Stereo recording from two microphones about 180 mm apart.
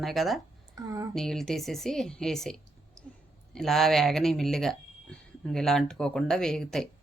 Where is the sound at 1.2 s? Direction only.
5° left (ahead or behind).